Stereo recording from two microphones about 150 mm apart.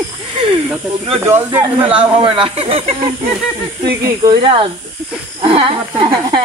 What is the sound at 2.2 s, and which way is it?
Speech, 35° right (ahead or behind).